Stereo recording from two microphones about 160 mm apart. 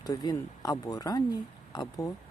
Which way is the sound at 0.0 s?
25° left (ahead or behind).